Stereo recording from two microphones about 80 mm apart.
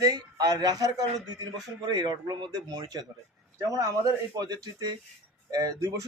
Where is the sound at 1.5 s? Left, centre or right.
Right.